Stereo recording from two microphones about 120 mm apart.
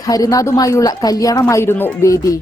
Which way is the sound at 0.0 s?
30° left (ahead or behind).